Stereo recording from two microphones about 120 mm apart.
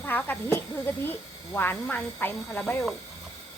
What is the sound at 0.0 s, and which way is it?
Speech, 15° left (ahead or behind).